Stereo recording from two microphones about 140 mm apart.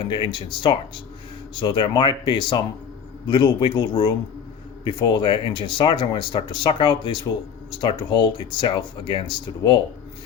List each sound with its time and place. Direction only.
0.0 s speech: 35° left (ahead or behind)